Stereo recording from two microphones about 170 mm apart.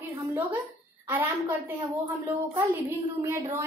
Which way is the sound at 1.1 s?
10° right (ahead or behind).